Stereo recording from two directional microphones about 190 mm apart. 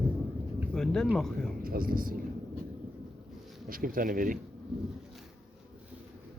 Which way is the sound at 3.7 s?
50° right (ahead or behind).